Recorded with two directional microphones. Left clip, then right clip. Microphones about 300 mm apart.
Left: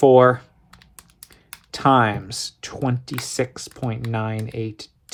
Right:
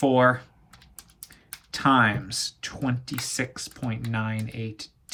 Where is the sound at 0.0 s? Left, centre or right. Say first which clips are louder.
Left 7 dB; left.